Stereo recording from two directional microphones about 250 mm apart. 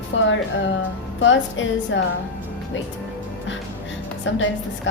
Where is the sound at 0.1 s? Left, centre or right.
Left.